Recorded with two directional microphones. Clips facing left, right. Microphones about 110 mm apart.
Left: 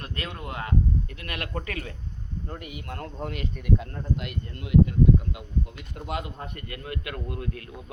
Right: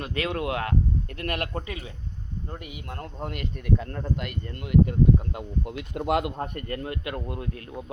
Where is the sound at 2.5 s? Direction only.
20° right (ahead or behind).